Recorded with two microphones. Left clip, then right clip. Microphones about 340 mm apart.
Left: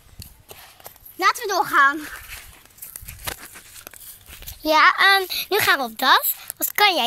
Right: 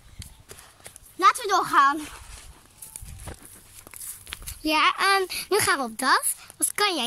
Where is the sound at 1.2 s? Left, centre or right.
Centre.